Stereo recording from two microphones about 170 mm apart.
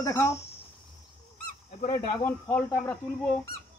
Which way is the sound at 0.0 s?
15° left (ahead or behind).